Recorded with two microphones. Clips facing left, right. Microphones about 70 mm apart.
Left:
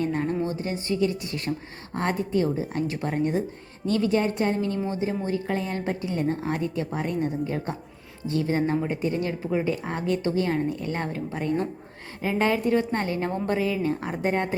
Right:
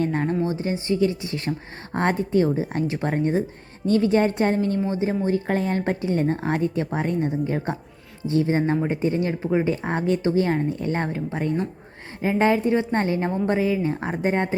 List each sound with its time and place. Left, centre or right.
0.0 s a woman's voice: right
0.4 s a woman's voice: right